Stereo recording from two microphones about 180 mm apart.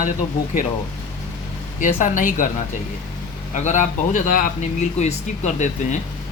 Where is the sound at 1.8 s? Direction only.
45° left (ahead or behind).